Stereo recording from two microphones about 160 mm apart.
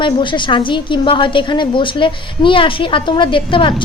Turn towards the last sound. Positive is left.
turn(degrees=30)  # may be behind; listen again after turning